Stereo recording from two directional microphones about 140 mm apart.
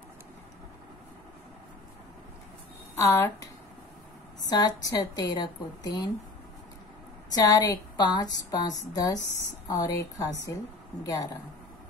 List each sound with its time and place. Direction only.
3.0 s speech: 20° left (ahead or behind)
4.5 s speech: 30° left (ahead or behind)
7.3 s speech: 25° left (ahead or behind)